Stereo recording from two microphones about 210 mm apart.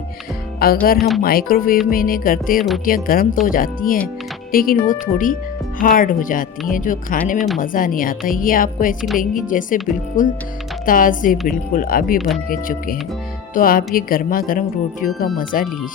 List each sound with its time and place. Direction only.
0.6 s speech: 45° left (ahead or behind)
0.9 s speech: centre (ahead or behind)
1.2 s speech: 45° left (ahead or behind)
7.3 s speech: centre (ahead or behind)
7.6 s speech: 40° left (ahead or behind)
9.0 s speech: centre (ahead or behind)
9.3 s speech: 40° left (ahead or behind)